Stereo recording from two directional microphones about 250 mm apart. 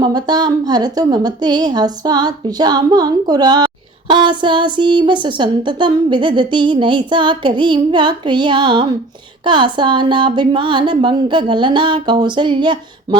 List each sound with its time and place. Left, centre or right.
0.0 s a woman's voice: centre